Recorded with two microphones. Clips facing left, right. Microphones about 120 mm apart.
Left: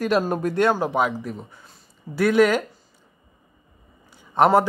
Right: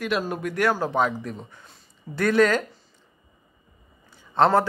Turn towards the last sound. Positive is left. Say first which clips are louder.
# left 2 dB
turn(degrees=15)  # may be behind; listen again after turning